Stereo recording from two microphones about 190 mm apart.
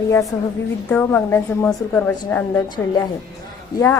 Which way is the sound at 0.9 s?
10° left (ahead or behind).